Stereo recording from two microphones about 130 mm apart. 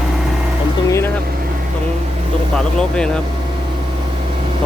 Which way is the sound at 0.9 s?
20° left (ahead or behind).